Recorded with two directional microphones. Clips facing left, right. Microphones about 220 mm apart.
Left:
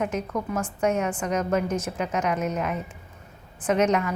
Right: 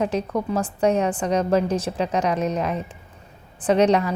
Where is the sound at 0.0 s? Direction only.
35° right (ahead or behind).